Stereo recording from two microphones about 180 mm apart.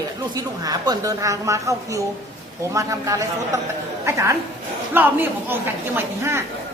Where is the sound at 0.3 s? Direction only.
20° right (ahead or behind).